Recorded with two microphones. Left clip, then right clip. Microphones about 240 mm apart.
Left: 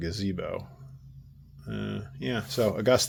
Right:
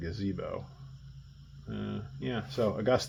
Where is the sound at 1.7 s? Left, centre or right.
Left.